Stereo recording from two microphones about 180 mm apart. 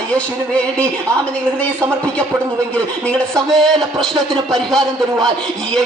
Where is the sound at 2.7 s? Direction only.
5° left (ahead or behind).